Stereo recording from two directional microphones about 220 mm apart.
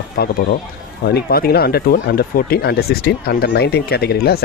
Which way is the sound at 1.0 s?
45° left (ahead or behind).